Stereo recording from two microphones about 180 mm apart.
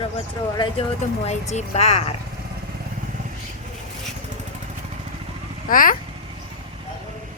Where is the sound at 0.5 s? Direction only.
30° left (ahead or behind).